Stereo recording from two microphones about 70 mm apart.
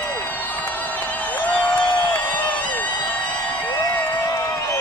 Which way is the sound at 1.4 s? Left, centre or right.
Centre.